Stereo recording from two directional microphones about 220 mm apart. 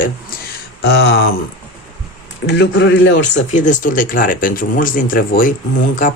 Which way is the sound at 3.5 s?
35° left (ahead or behind).